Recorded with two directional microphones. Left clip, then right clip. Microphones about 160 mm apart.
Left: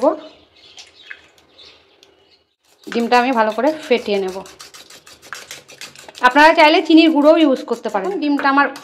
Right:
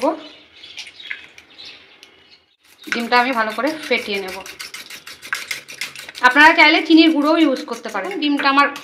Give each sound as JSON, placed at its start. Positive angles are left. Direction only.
{"t": 2.9, "sound": "a woman's voice", "side_deg": 65}
{"t": 6.1, "sound": "a woman's voice", "side_deg": 60}
{"t": 8.3, "sound": "speech", "side_deg": 45}